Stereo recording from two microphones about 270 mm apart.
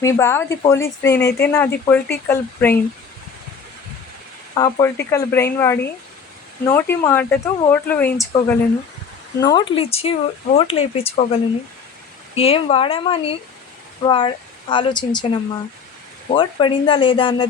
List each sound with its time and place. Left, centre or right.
0.0 s speech: centre
1.2 s speech: left
1.5 s speech: centre
4.5 s speech: centre
12.3 s speech: left
16.3 s speech: centre